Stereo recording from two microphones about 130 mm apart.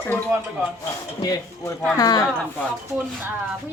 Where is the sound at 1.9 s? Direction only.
30° left (ahead or behind).